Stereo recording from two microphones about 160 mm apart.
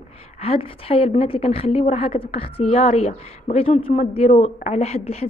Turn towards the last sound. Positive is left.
turn(degrees=40)  # may be behind; listen again after turning